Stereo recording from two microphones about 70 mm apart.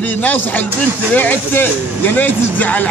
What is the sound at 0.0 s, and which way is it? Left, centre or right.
A man's voice, left.